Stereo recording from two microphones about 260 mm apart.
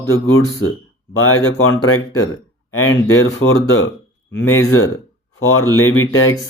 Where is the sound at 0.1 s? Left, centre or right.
Left.